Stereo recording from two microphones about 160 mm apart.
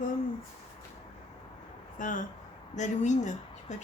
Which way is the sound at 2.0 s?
55° left (ahead or behind).